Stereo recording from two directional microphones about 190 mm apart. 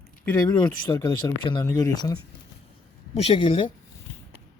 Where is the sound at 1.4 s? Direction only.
25° left (ahead or behind).